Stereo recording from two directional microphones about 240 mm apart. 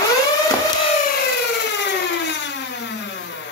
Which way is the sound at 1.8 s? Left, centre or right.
Left.